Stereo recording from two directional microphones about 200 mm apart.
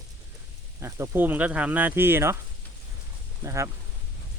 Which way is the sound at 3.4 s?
15° right (ahead or behind).